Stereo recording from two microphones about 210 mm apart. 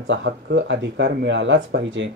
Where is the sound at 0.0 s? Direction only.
60° right (ahead or behind).